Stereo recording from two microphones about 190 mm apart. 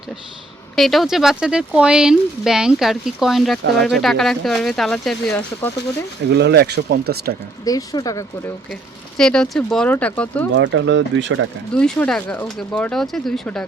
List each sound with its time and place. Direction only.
0.8 s speech: centre (ahead or behind)
6.3 s speech: 60° right (ahead or behind)
7.6 s speech: 20° left (ahead or behind)
9.1 s speech: 5° left (ahead or behind)
10.5 s speech: 75° right (ahead or behind)
11.7 s speech: 5° left (ahead or behind)